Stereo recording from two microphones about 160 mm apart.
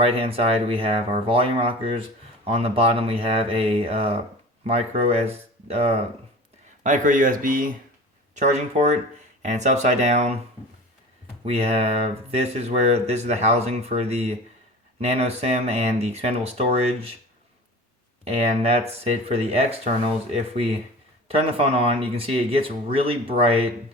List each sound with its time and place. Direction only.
0.0 s speech: 35° right (ahead or behind)
6.8 s speech: 55° right (ahead or behind)
8.4 s speech: 45° right (ahead or behind)
11.4 s speech: 40° right (ahead or behind)
18.3 s speech: 40° right (ahead or behind)
21.2 s speech: 35° right (ahead or behind)